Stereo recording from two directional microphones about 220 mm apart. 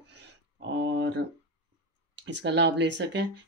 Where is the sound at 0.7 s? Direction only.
55° right (ahead or behind).